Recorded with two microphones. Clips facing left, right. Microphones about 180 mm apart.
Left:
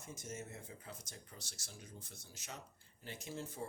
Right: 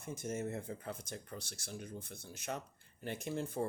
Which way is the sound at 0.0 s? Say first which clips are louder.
Right 8 dB; 55° right (ahead or behind).